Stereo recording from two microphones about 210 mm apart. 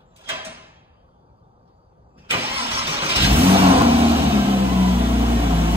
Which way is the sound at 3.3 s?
25° right (ahead or behind).